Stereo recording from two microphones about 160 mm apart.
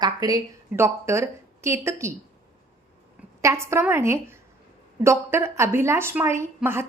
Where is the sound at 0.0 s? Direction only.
25° right (ahead or behind).